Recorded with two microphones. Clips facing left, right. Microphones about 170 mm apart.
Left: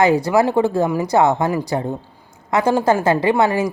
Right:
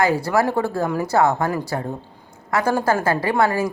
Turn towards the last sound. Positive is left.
turn(degrees=20)  # may be behind; listen again after turning